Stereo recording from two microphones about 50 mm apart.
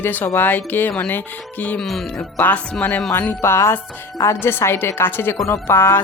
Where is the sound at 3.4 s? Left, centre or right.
Left.